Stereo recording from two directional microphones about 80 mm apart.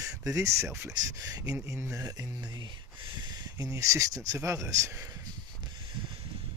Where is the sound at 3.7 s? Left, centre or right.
Right.